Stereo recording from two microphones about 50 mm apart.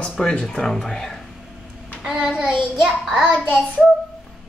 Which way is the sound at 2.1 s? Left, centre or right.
Centre.